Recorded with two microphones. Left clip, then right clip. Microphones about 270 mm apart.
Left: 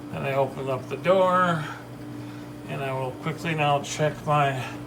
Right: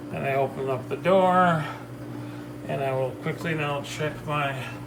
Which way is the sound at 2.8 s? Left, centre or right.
Centre.